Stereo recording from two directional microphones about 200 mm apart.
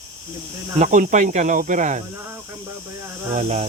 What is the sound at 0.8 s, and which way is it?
Speech, 40° right (ahead or behind).